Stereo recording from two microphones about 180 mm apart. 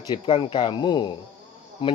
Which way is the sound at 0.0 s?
25° left (ahead or behind).